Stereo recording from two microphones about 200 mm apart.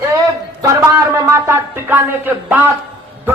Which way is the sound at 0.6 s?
15° right (ahead or behind).